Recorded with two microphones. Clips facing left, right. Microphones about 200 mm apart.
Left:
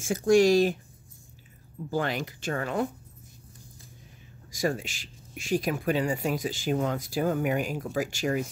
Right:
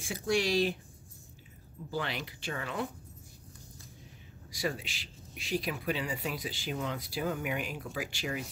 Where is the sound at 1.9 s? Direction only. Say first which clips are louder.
Left 7 dB; 45° left (ahead or behind).